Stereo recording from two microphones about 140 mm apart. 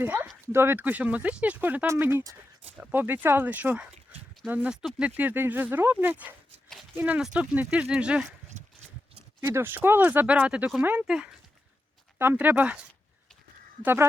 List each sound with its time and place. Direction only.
0.0 s speech: 15° right (ahead or behind)
9.5 s speech: 15° right (ahead or behind)
13.8 s speech: 15° right (ahead or behind)